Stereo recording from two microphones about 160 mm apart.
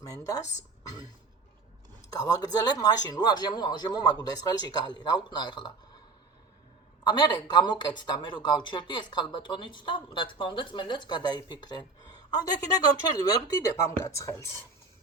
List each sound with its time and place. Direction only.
0.0 s speech: 20° left (ahead or behind)
2.1 s speech: 20° left (ahead or behind)
7.1 s speech: 25° left (ahead or behind)